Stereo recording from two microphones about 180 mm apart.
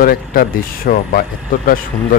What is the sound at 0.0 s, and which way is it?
Speech, 55° left (ahead or behind).